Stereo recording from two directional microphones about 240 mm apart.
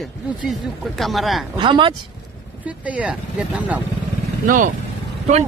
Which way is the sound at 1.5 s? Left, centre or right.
Centre.